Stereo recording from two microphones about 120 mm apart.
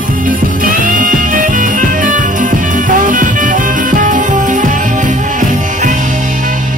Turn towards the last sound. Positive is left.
turn(degrees=-90)